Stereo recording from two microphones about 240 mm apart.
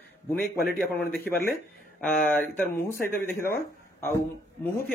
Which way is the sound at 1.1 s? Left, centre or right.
Left.